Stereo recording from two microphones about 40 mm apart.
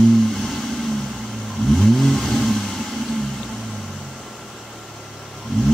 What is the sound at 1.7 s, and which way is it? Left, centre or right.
Vehicle, centre.